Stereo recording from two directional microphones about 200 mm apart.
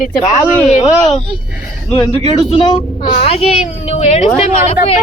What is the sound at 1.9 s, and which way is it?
A woman's voice, 20° left (ahead or behind).